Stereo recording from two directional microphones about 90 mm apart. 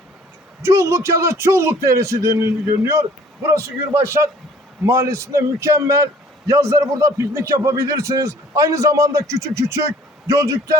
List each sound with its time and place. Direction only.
0.6 s a man's voice: 30° right (ahead or behind)